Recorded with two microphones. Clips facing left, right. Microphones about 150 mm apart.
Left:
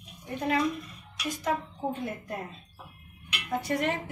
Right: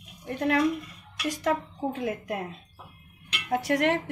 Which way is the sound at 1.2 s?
85° right.